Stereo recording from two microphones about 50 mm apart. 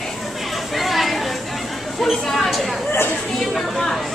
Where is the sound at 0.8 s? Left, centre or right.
Centre.